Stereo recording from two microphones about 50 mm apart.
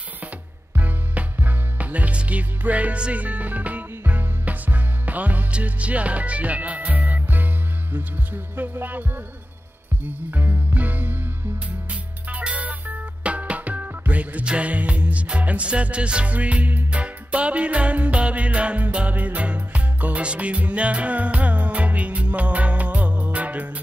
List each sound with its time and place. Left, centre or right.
0.7 s music: right